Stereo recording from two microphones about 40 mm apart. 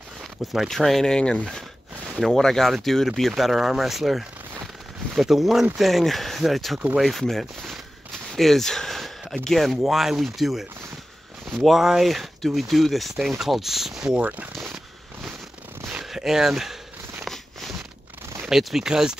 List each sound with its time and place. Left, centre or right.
0.7 s speech: centre
1.1 s speech: left
2.1 s speech: centre
8.4 s a sound: centre
9.4 s speech: centre
9.8 s speech: centre
14.2 s speech: right
15.9 s a sound: centre
17.3 s a sound: centre
18.5 s speech: centre